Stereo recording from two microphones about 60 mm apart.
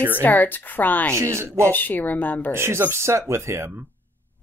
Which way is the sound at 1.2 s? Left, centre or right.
Right.